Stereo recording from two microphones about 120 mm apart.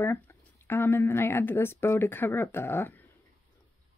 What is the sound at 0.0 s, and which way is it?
Speech, 20° left (ahead or behind).